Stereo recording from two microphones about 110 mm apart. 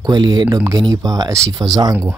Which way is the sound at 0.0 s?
40° right (ahead or behind).